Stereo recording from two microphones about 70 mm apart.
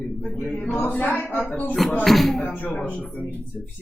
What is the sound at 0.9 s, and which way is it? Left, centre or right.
Speech, left.